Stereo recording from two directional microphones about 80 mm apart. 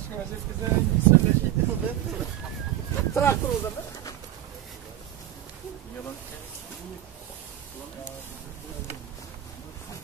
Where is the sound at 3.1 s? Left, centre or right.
Left.